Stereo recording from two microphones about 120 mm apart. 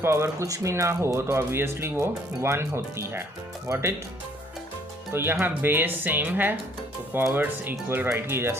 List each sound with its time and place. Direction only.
0.0 s speech: 20° right (ahead or behind)
5.1 s speech: 20° right (ahead or behind)